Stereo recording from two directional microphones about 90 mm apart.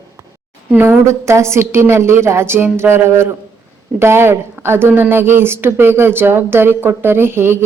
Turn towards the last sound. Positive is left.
turn(degrees=-25)  # may be behind; listen again after turning